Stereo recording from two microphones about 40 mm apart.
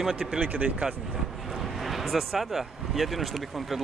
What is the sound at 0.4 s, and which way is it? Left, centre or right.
Speech, right.